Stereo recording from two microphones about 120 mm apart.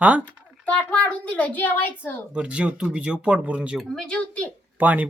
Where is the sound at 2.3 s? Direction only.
10° right (ahead or behind).